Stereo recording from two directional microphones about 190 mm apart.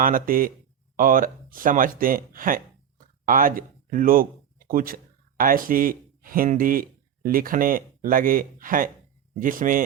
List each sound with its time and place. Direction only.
0.0 s speech: 45° right (ahead or behind)